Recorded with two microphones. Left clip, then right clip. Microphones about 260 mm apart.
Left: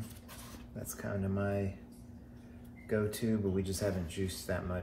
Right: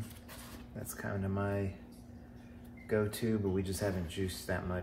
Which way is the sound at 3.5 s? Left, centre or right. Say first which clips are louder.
Even; centre.